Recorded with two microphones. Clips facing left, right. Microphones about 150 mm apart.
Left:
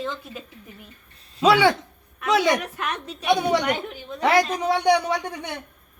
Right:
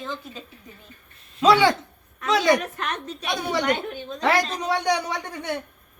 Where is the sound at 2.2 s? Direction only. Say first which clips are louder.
Even; 10° left (ahead or behind).